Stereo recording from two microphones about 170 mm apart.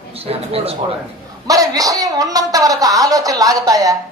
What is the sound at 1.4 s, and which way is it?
Speech, 20° right (ahead or behind).